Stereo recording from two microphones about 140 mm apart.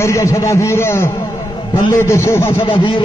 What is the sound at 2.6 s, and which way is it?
Speech, 35° left (ahead or behind).